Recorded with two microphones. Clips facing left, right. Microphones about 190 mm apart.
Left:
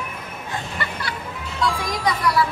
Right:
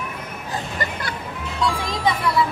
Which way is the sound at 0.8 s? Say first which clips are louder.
Right 2 dB; 50° right (ahead or behind).